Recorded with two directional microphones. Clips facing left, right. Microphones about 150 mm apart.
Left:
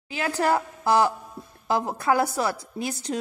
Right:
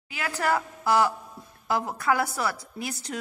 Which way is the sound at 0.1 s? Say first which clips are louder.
Left 3 dB; 25° left (ahead or behind).